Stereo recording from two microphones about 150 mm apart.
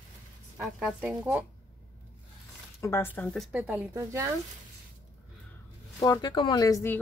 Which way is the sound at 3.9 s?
20° right (ahead or behind).